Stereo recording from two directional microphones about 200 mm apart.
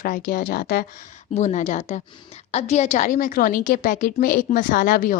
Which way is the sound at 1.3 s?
35° left (ahead or behind).